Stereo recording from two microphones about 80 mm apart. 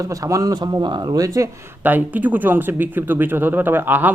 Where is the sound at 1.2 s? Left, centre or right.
Right.